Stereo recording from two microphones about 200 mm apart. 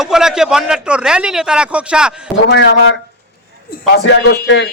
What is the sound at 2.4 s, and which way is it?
Speech, 60° left (ahead or behind).